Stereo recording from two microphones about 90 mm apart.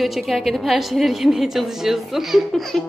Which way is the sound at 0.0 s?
Centre (ahead or behind).